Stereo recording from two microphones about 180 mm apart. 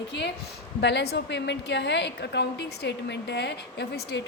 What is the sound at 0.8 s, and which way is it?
A woman's voice, 70° left (ahead or behind).